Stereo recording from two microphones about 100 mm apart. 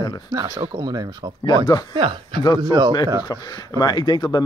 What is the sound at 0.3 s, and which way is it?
Speech, 45° right (ahead or behind).